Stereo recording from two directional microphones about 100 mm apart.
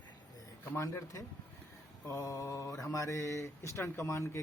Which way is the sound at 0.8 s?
30° left (ahead or behind).